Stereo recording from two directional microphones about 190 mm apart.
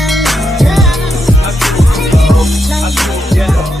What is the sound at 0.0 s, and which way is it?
Music, centre (ahead or behind).